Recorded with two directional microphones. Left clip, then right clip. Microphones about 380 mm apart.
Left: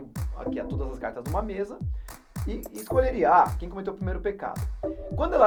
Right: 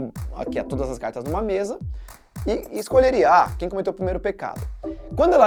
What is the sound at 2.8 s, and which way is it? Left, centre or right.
Speech, right.